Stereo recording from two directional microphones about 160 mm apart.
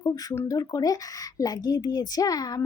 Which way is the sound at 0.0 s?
25° left (ahead or behind).